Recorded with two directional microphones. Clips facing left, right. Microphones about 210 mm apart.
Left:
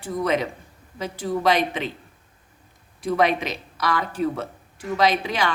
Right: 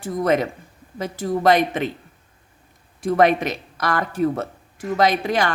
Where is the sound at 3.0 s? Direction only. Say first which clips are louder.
Right 4 dB; 50° right (ahead or behind).